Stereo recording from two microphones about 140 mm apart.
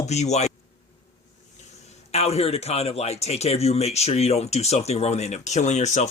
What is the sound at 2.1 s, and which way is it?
Speech, 50° left (ahead or behind).